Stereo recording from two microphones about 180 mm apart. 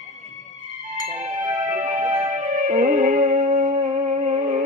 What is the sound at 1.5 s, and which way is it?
Music, 20° right (ahead or behind).